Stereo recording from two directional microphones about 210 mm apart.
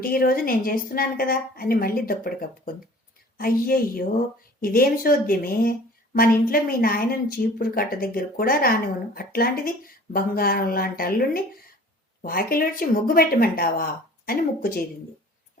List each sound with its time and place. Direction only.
0.0 s speech: 45° left (ahead or behind)